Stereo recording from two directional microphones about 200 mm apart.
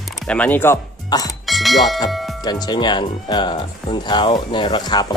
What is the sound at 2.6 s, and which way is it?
Speech, 20° left (ahead or behind).